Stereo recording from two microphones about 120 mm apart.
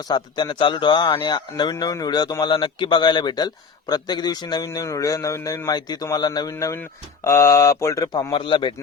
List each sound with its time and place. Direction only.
0.1 s a man's voice: 40° left (ahead or behind)
8.3 s speech: 45° left (ahead or behind)